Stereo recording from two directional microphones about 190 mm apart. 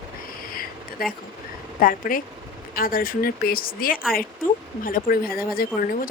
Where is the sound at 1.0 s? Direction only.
50° left (ahead or behind).